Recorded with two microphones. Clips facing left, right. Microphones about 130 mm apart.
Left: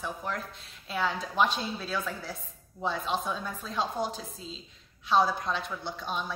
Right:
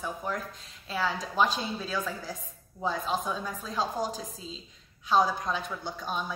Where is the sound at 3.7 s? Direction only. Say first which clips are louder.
Even; 40° right (ahead or behind).